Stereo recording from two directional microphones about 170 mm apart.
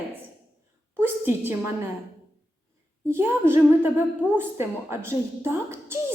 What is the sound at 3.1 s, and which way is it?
A woman's voice, 15° right (ahead or behind).